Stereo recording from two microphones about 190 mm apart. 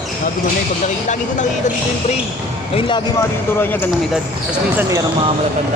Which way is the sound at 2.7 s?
25° left (ahead or behind).